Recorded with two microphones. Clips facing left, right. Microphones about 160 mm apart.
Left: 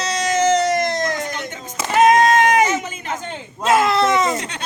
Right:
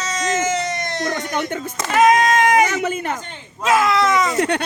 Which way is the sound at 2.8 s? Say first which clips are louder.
Right 8 dB; 60° right (ahead or behind).